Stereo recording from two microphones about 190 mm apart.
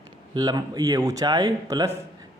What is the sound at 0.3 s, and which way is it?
A man's voice, 20° right (ahead or behind).